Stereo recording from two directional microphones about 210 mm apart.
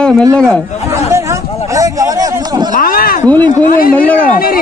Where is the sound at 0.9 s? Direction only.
15° right (ahead or behind).